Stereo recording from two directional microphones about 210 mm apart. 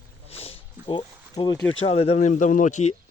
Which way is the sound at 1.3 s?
20° left (ahead or behind).